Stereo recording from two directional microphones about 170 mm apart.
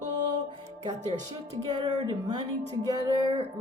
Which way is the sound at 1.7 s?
25° right (ahead or behind).